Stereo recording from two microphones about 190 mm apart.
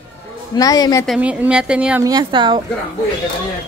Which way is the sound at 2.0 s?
20° right (ahead or behind).